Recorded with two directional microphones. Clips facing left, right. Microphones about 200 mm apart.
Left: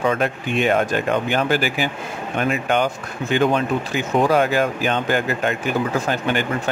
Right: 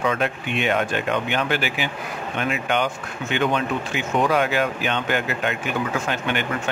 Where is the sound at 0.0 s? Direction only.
35° left (ahead or behind).